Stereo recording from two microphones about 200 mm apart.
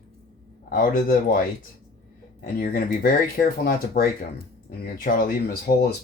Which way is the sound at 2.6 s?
45° left (ahead or behind).